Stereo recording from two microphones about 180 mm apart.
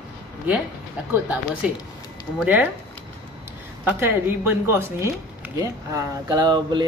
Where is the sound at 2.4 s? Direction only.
10° right (ahead or behind).